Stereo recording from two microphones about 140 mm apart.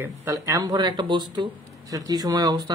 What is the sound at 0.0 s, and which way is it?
Speech, 20° right (ahead or behind).